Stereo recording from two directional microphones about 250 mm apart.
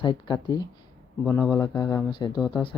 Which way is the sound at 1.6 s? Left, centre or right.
Centre.